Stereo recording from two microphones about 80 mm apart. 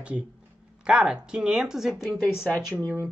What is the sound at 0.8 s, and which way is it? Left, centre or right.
Speech, centre.